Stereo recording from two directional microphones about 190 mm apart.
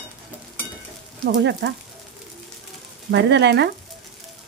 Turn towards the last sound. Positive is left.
turn(degrees=-65)  # may be behind; listen again after turning